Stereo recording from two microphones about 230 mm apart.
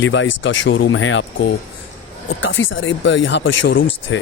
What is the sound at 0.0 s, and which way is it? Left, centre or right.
Speech, left.